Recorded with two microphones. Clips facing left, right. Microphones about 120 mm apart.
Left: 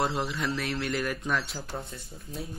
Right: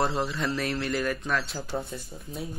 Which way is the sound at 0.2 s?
Centre (ahead or behind).